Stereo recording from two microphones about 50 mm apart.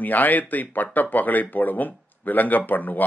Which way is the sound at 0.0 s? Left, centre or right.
Left.